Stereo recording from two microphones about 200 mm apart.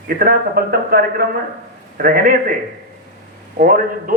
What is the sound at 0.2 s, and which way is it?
A man's voice, 50° right (ahead or behind).